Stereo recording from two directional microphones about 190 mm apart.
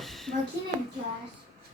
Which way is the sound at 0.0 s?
Centre (ahead or behind).